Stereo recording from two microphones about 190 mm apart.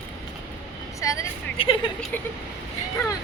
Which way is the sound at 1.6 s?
30° left (ahead or behind).